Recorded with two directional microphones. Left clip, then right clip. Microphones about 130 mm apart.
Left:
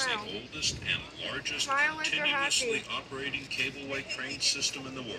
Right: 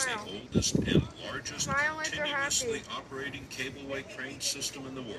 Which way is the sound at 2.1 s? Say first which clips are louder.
Left 3 dB; 55° left (ahead or behind).